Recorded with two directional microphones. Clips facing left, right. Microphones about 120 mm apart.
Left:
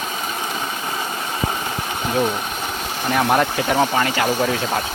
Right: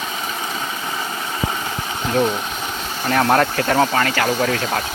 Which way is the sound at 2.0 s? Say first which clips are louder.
Right 2 dB; 5° left (ahead or behind).